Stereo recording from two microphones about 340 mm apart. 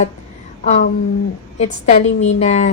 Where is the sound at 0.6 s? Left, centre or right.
Centre.